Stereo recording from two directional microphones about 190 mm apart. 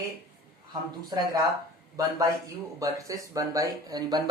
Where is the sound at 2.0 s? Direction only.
20° right (ahead or behind).